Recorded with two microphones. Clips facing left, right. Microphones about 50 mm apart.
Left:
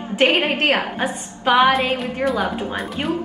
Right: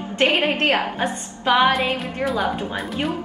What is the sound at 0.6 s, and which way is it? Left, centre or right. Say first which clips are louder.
A woman's voice: left 1 dB; centre.